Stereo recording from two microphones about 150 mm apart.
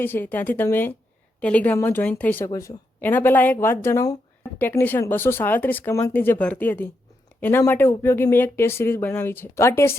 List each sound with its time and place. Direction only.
0.0 s speech: 15° left (ahead or behind)